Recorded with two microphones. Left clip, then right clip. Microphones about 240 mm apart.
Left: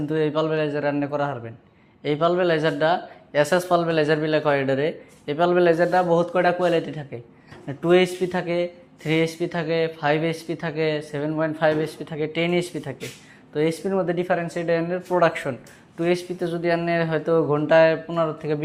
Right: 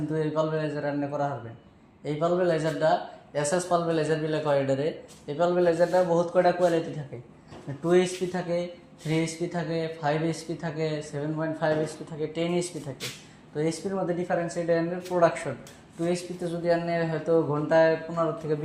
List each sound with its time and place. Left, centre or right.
0.1 s a man's voice: left
9.0 s speech: left